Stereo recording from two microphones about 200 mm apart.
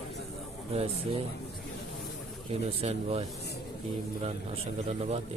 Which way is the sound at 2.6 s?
30° right (ahead or behind).